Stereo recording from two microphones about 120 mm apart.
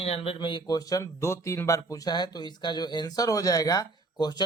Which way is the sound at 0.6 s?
30° left (ahead or behind).